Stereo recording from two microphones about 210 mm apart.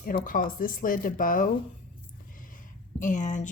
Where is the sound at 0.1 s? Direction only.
35° left (ahead or behind).